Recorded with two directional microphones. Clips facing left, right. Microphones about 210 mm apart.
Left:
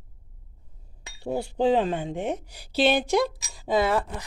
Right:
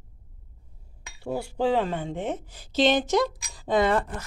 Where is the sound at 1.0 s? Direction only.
25° left (ahead or behind).